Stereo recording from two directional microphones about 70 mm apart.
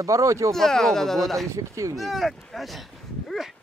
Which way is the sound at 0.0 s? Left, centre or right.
Right.